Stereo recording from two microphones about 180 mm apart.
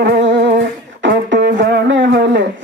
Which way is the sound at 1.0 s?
80° right.